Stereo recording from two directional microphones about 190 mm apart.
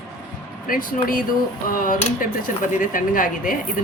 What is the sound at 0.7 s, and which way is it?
Speech, 45° left (ahead or behind).